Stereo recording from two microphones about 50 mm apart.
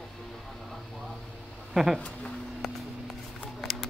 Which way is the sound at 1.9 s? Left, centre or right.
Left.